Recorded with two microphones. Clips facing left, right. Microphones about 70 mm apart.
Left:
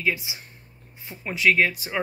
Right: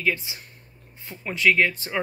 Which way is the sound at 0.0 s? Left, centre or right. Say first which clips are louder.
Right 1 dB; centre.